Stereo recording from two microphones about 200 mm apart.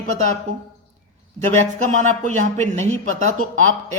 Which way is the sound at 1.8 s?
35° right (ahead or behind).